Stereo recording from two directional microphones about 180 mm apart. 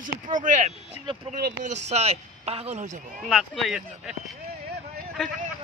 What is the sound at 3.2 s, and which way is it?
Speech, centre (ahead or behind).